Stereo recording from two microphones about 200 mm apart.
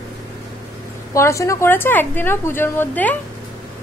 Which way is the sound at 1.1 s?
15° left (ahead or behind).